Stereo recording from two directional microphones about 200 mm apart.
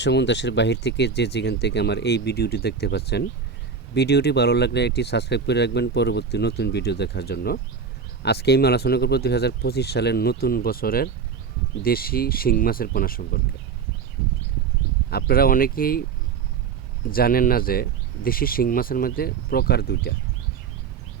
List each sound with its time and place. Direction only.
0.0 s speech: 60° left (ahead or behind)
15.1 s speech: 50° left (ahead or behind)
17.1 s speech: 50° left (ahead or behind)